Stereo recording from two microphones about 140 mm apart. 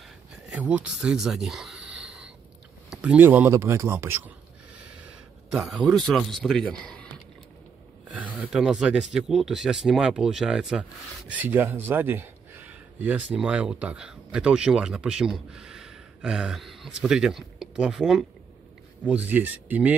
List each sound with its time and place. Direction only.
0.5 s a man's voice: 10° right (ahead or behind)
5.5 s speech: 5° right (ahead or behind)
8.1 s a man's voice: 10° right (ahead or behind)